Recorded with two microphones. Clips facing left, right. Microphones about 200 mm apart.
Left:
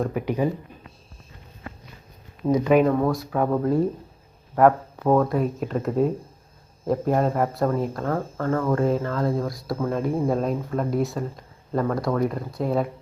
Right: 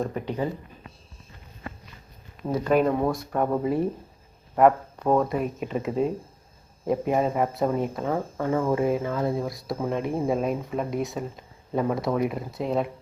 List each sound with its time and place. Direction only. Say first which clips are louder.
0.0 s speech: left 4 dB; 10° left (ahead or behind)
2.5 s speech: left 4 dB; 5° left (ahead or behind)